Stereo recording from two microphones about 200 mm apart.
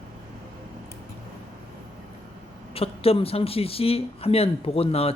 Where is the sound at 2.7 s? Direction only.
30° left (ahead or behind).